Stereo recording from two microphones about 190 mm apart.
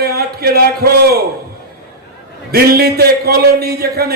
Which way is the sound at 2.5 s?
55° right (ahead or behind).